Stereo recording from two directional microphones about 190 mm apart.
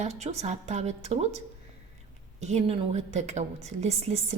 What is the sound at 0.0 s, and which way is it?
A woman's voice, 35° right (ahead or behind).